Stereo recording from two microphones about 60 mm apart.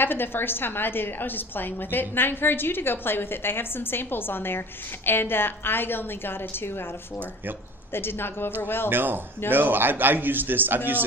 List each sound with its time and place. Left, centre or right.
0.0 s a woman's voice: left
7.9 s a woman's voice: left
8.9 s a man's voice: right